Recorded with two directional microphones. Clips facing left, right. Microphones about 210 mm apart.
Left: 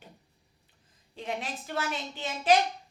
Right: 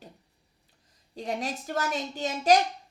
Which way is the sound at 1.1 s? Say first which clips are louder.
Right 3 dB; 40° right (ahead or behind).